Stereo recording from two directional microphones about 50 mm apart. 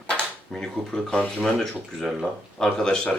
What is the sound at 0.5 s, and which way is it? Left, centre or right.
Speech, centre.